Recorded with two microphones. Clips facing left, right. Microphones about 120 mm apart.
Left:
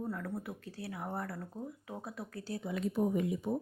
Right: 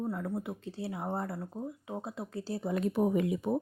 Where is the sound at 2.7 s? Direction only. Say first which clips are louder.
Right 3 dB; 60° right (ahead or behind).